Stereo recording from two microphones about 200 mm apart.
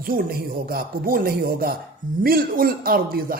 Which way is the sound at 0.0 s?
45° right (ahead or behind).